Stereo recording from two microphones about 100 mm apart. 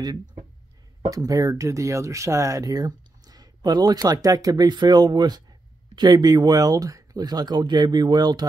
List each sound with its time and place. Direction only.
0.0 s speech: 45° right (ahead or behind)